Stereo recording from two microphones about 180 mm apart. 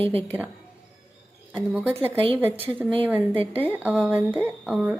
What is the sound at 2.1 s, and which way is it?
A woman's voice, 30° right (ahead or behind).